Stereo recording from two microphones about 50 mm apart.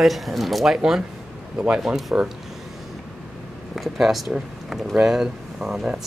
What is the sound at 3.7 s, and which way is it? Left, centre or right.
Speech, centre.